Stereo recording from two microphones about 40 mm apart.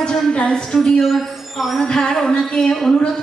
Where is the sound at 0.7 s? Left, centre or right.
Centre.